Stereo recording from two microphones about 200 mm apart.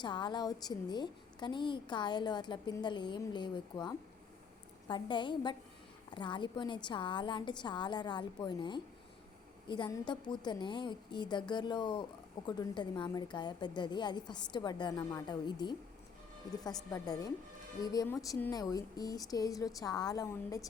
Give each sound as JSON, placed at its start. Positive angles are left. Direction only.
{"t": 0.0, "sound": "a woman's voice", "side_deg": 20}
{"t": 16.9, "sound": "a woman's voice", "side_deg": 20}